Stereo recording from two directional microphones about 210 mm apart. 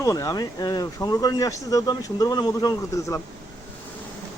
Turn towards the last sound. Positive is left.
turn(degrees=15)  # may be behind; listen again after turning